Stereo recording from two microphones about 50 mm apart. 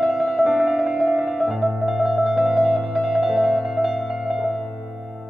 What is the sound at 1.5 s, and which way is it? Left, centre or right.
Music, centre.